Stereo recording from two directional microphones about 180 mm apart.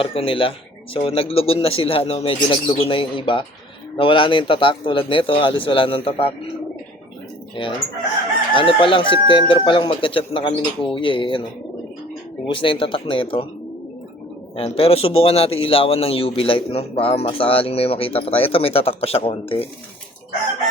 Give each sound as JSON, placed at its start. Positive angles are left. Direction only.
{"t": 0.0, "sound": "a man's voice", "side_deg": 30}
{"t": 8.5, "sound": "speech", "side_deg": 30}
{"t": 12.5, "sound": "speech", "side_deg": 30}
{"t": 14.5, "sound": "a man's voice", "side_deg": 35}